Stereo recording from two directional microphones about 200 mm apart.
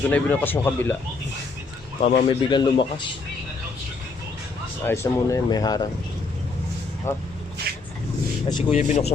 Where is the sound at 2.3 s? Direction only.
25° left (ahead or behind).